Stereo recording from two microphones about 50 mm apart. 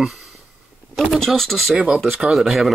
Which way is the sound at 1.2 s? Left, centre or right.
Centre.